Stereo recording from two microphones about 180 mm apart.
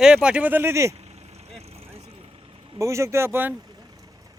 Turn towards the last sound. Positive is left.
turn(degrees=-10)  # may be behind; listen again after turning